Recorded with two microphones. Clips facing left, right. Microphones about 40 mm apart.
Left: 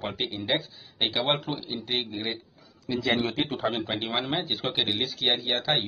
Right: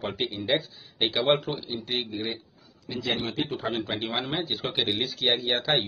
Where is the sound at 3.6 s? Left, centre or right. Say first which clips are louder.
Left 1 dB; centre.